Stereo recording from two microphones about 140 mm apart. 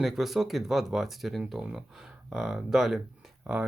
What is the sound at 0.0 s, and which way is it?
Speech, centre (ahead or behind).